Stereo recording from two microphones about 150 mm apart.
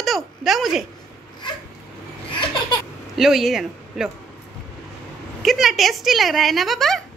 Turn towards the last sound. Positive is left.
turn(degrees=0)  # may be behind; listen again after turning